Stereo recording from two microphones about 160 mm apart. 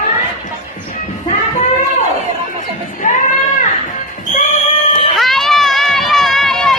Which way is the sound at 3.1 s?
55° left (ahead or behind).